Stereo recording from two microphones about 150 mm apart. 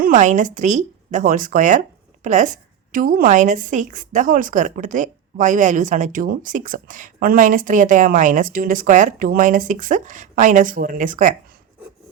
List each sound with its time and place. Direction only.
0.0 s a woman's voice: 55° right (ahead or behind)